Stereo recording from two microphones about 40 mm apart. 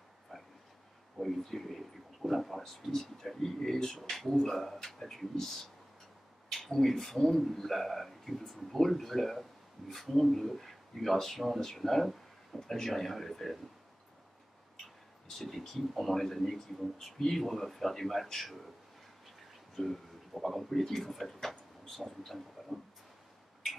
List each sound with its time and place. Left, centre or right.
0.3 s a sound: centre
1.2 s speech: centre
15.3 s speech: centre
19.7 s speech: centre